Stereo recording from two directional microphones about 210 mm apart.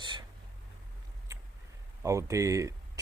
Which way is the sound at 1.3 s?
15° right (ahead or behind).